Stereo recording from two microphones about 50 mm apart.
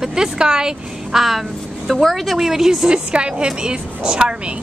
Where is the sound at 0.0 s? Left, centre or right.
Centre.